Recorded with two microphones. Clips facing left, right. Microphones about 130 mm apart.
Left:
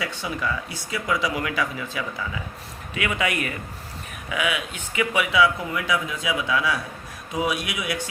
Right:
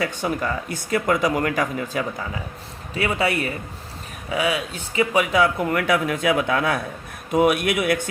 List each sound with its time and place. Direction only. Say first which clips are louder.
0.0 s speech: right 4 dB; 50° right (ahead or behind)